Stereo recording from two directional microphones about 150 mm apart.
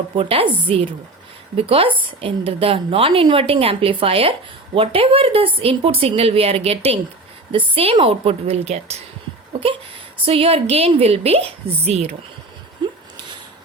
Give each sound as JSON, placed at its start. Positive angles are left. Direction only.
{"t": 0.2, "sound": "a woman's voice", "side_deg": -40}
{"t": 9.5, "sound": "a sound", "side_deg": -40}
{"t": 10.2, "sound": "a woman's voice", "side_deg": -40}